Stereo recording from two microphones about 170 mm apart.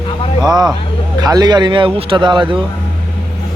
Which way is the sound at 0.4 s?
25° right (ahead or behind).